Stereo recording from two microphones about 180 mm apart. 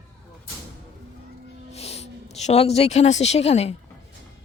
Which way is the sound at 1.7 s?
35° left (ahead or behind).